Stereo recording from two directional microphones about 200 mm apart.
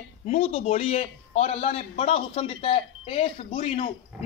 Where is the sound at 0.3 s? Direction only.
30° left (ahead or behind).